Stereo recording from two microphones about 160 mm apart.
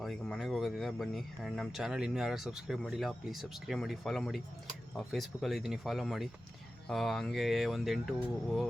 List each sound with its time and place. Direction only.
0.0 s speech: centre (ahead or behind)